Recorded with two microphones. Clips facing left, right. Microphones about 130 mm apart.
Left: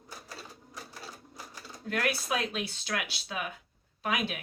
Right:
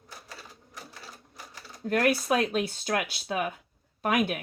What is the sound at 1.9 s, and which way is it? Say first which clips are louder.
Speech: right 7 dB; 45° right (ahead or behind).